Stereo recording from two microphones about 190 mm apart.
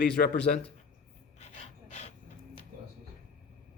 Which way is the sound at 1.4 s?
35° left (ahead or behind).